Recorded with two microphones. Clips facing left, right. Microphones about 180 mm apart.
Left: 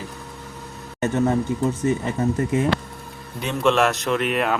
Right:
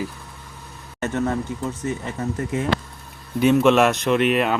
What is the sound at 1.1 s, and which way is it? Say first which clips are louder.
Speech: left 3 dB; 25° left (ahead or behind).